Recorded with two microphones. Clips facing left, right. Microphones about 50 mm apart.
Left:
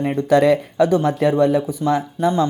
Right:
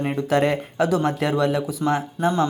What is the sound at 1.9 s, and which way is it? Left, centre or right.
Speech, right.